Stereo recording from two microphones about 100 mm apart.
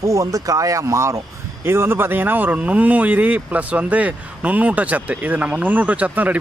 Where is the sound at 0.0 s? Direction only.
35° right (ahead or behind).